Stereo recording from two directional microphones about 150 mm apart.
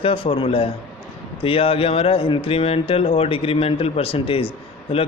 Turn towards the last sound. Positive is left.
turn(degrees=40)  # may be behind; listen again after turning